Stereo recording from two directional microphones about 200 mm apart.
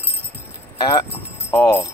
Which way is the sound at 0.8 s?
25° left (ahead or behind).